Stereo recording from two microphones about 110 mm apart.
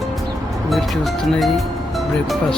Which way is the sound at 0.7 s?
Centre (ahead or behind).